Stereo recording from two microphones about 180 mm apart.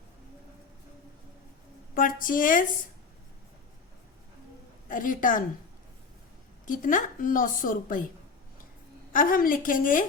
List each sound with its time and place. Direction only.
2.0 s a woman's voice: 50° left (ahead or behind)
4.9 s a woman's voice: 50° left (ahead or behind)
6.7 s a woman's voice: 45° left (ahead or behind)
9.1 s a woman's voice: 50° left (ahead or behind)